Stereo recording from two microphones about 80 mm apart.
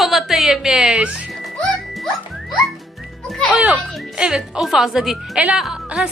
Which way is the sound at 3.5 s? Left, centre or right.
Centre.